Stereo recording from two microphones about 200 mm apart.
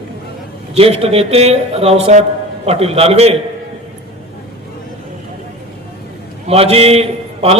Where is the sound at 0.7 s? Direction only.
30° right (ahead or behind).